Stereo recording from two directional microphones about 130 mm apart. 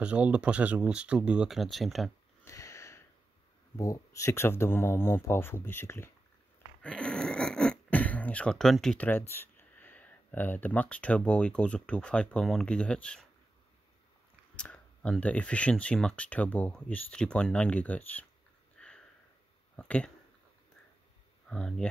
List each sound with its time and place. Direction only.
0.0 s speech: 10° right (ahead or behind)
2.4 s sniff: 25° left (ahead or behind)
3.7 s speech: 25° left (ahead or behind)
6.8 s a sound: 10° left (ahead or behind)
9.3 s speech: 15° left (ahead or behind)
14.5 s speech: 10° left (ahead or behind)
18.8 s sniff: 5° left (ahead or behind)
19.8 s speech: 10° left (ahead or behind)
21.5 s speech: 5° left (ahead or behind)